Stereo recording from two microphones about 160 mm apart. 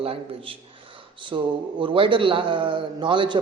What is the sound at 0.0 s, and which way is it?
A man's voice, 35° right (ahead or behind).